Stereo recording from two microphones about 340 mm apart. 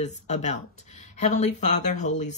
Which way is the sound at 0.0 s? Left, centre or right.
Left.